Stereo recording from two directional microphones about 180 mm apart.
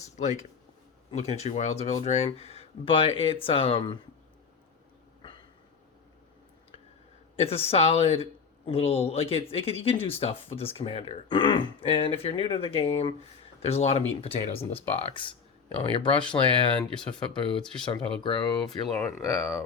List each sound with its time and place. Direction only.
0.2 s speech: 40° left (ahead or behind)
7.3 s a woman's voice: 35° left (ahead or behind); by 19.4 s 15° left (ahead or behind)